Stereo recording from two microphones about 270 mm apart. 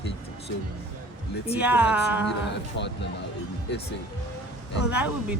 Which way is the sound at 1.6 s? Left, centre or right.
Centre.